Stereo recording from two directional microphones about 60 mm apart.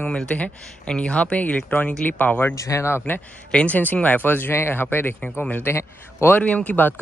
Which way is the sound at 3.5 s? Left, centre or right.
Left.